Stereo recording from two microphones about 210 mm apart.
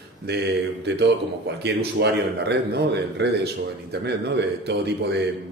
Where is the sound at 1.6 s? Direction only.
55° right (ahead or behind).